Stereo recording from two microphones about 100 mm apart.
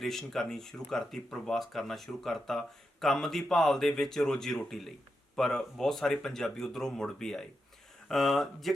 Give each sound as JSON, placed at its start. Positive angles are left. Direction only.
{"t": 0.0, "sound": "speech", "side_deg": 5}